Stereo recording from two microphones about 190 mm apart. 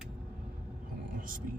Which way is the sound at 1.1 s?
45° right (ahead or behind).